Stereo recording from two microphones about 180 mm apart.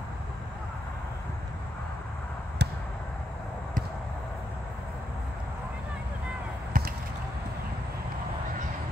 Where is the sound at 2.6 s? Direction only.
70° right (ahead or behind).